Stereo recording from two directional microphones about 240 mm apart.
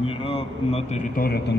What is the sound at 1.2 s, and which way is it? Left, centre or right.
Speech, left.